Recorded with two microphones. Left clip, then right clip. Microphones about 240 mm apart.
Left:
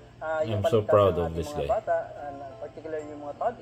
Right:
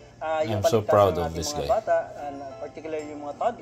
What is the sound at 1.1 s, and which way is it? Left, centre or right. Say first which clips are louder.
Speech: right 2 dB; right.